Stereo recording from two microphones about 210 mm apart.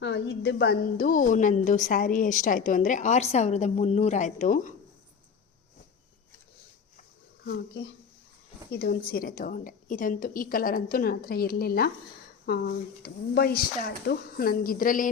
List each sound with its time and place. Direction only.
0.0 s a woman's voice: 50° left (ahead or behind); by 4.7 s 35° left (ahead or behind)
7.4 s a woman's voice: 50° left (ahead or behind)